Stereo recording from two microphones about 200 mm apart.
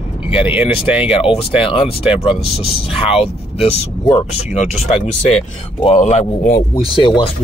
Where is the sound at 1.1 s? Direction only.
30° left (ahead or behind).